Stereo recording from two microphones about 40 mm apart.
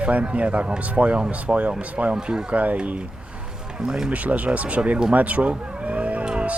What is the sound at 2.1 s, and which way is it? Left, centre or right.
Speech, centre.